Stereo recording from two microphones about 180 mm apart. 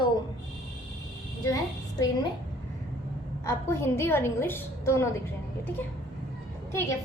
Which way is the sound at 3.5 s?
15° left (ahead or behind).